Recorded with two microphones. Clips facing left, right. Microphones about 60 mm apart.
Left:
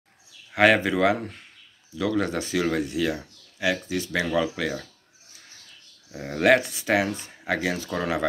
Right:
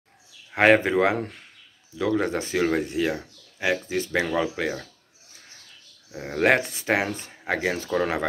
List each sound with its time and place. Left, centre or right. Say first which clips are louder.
0.6 s speech: right 1 dB; right
6.1 s speech: right 1 dB; centre
6.4 s speech: left 1 dB; right